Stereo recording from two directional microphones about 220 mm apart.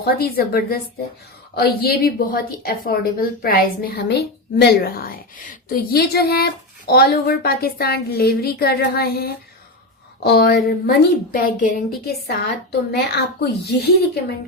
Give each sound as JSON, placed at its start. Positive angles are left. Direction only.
{"t": 0.0, "sound": "a woman's voice", "side_deg": 45}